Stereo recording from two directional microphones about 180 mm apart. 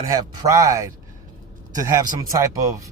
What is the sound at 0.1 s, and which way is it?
Speech, 15° right (ahead or behind).